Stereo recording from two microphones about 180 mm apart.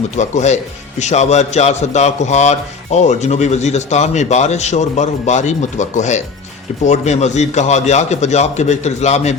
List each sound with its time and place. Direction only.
0.2 s a man's voice: 40° left (ahead or behind)